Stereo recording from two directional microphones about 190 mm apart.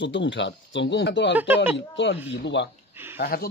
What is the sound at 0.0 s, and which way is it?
Speech, 70° left (ahead or behind).